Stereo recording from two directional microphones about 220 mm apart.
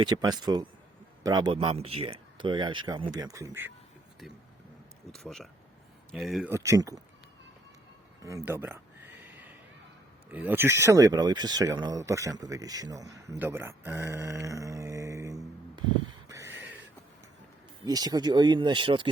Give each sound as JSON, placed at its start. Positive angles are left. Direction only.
{"t": 0.0, "sound": "speech", "side_deg": -20}
{"t": 5.1, "sound": "speech", "side_deg": 0}
{"t": 6.5, "sound": "speech", "side_deg": -15}
{"t": 8.2, "sound": "a sound", "side_deg": -15}
{"t": 10.3, "sound": "speech", "side_deg": -10}
{"t": 13.4, "sound": "a sound", "side_deg": -10}
{"t": 17.8, "sound": "speech", "side_deg": -15}